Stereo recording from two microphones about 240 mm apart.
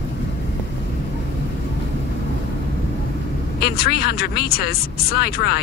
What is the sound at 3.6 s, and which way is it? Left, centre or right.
Speech, left.